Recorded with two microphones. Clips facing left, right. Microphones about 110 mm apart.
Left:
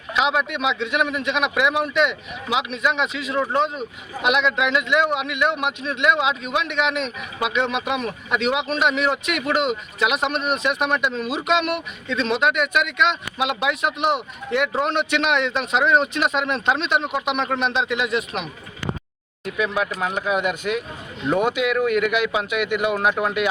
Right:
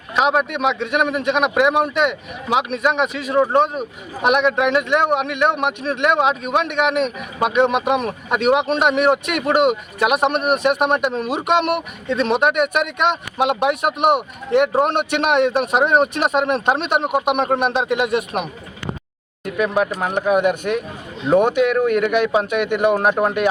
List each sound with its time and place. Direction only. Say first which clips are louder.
0.2 s speech: right 4 dB; 45° right (ahead or behind)
19.5 s speech: right 4 dB; 45° right (ahead or behind)